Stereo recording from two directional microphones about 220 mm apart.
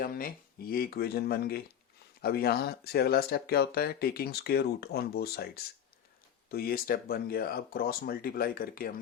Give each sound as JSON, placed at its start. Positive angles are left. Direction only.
{"t": 0.0, "sound": "speech", "side_deg": 40}